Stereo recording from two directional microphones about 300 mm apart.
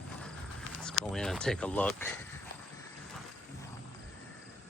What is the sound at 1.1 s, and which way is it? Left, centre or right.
Speech, centre.